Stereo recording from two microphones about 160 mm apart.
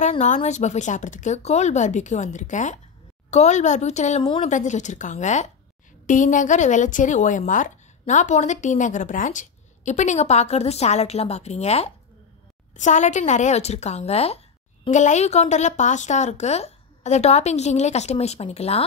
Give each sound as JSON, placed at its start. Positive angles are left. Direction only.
{"t": 0.2, "sound": "a woman's voice", "side_deg": 45}